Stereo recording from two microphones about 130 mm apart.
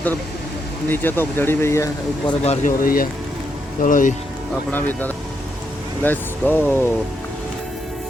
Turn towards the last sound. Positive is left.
turn(degrees=15)  # may be behind; listen again after turning